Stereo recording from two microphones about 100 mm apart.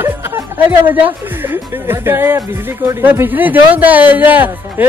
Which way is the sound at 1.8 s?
25° right (ahead or behind).